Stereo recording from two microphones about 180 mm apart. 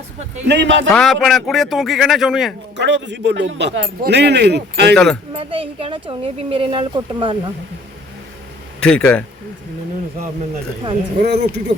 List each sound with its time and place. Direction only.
0.4 s speech: 75° right (ahead or behind)
0.9 s speech: centre (ahead or behind)
2.7 s speech: 75° right (ahead or behind)
5.3 s speech: 30° right (ahead or behind)
8.8 s speech: 5° left (ahead or behind)
11.3 s speech: 65° right (ahead or behind)